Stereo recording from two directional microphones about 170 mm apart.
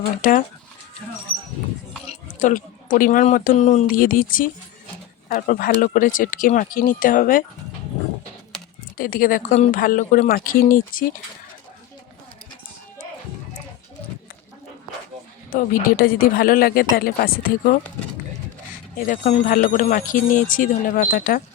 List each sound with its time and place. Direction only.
0.0 s speech: 55° left (ahead or behind)
2.0 s speech: 50° left (ahead or behind)
9.0 s speech: 55° left (ahead or behind)
15.5 s speech: 55° left (ahead or behind)
18.9 s speech: 50° left (ahead or behind)